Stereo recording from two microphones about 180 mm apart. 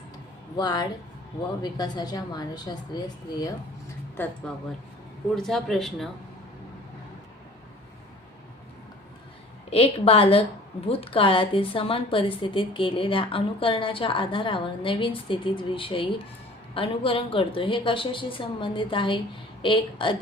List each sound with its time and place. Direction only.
0.5 s a woman's voice: 20° left (ahead or behind)
5.3 s speech: centre (ahead or behind)
9.6 s a woman's voice: 30° left (ahead or behind)